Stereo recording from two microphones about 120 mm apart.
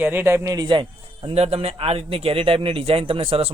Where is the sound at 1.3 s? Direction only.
60° right (ahead or behind).